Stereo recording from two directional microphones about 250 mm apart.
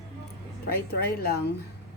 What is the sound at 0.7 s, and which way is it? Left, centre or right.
Speech, left.